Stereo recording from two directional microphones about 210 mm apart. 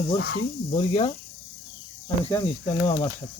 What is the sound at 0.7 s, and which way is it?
Speech, 30° left (ahead or behind).